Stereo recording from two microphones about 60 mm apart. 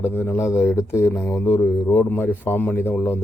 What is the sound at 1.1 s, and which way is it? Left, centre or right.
A man's voice, left.